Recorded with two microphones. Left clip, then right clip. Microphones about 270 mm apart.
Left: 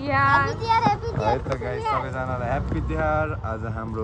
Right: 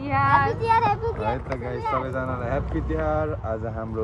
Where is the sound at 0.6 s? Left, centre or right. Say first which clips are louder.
Even; right.